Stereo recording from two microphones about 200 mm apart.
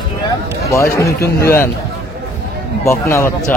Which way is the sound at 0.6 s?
15° left (ahead or behind).